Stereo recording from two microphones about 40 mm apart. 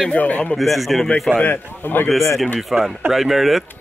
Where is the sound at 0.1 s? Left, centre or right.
Left.